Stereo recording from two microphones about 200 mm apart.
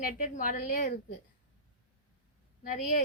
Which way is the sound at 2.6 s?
45° left (ahead or behind).